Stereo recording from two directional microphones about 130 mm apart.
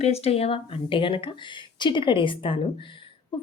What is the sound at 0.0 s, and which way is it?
A woman's voice, 55° left (ahead or behind).